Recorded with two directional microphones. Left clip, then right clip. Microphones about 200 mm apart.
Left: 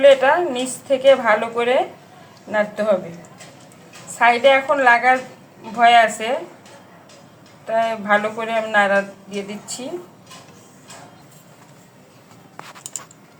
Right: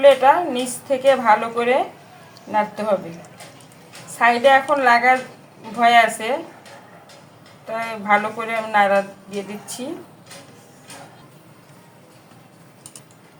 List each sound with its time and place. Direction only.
0.0 s a woman's voice: centre (ahead or behind)
4.2 s speech: centre (ahead or behind)
7.7 s speech: centre (ahead or behind)